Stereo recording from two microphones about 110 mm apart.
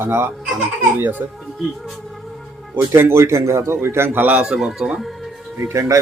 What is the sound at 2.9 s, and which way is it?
A man's voice, 25° right (ahead or behind).